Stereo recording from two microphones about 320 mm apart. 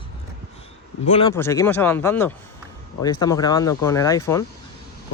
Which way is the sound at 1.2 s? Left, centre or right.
Centre.